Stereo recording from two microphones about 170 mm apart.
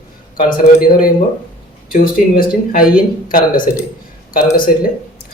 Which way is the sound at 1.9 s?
60° left (ahead or behind).